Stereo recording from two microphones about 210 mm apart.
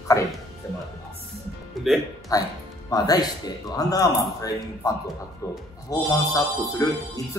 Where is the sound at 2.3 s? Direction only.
15° left (ahead or behind).